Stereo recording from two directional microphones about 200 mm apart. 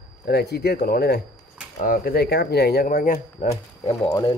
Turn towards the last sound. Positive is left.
turn(degrees=20)  # may be behind; listen again after turning